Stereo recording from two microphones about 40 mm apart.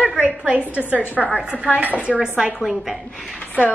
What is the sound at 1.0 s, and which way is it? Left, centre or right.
Speech, left.